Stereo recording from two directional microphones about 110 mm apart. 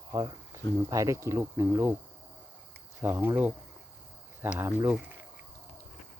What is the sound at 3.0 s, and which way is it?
Speech, 20° right (ahead or behind).